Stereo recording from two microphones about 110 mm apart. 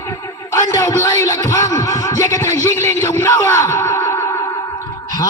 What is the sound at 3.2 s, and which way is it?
A man's voice, 25° left (ahead or behind).